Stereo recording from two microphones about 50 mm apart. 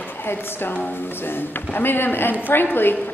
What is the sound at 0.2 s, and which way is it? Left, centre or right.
Speech, left.